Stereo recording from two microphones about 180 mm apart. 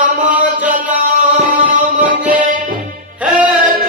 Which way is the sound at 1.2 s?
40° right (ahead or behind).